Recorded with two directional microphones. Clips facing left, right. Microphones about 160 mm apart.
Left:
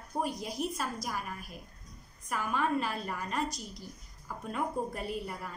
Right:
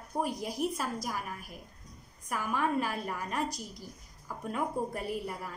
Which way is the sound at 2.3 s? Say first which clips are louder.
Even; 10° right (ahead or behind).